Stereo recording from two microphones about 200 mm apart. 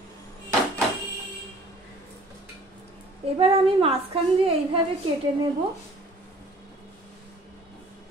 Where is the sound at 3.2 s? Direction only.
30° right (ahead or behind).